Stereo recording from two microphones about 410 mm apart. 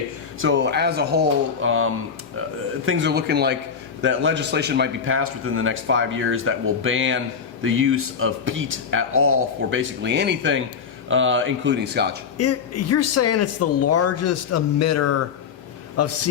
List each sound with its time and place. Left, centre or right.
0.3 s a man's voice: right
12.4 s speech: left